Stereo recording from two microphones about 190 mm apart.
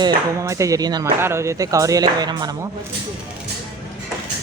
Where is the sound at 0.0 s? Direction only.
15° right (ahead or behind).